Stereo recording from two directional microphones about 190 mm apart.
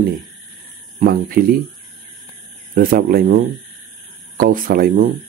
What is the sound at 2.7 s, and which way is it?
Speech, 50° right (ahead or behind).